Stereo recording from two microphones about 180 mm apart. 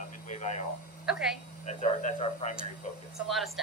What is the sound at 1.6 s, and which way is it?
Speech, 40° left (ahead or behind).